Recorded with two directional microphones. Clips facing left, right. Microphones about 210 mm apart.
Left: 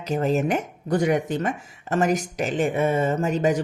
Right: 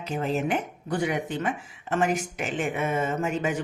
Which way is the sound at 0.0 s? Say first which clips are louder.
Left 5 dB; 40° left (ahead or behind).